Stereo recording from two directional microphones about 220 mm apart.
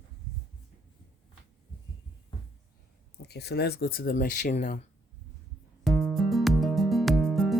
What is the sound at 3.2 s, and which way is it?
Speech, 50° left (ahead or behind).